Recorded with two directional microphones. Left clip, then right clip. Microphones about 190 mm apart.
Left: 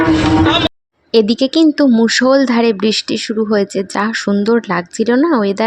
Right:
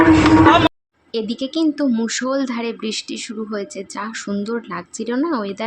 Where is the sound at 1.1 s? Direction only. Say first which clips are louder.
Left 11 dB; 40° left (ahead or behind).